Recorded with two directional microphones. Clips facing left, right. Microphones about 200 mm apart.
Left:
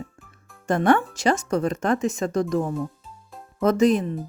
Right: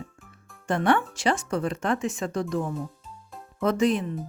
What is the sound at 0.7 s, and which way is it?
Speech, 40° left (ahead or behind).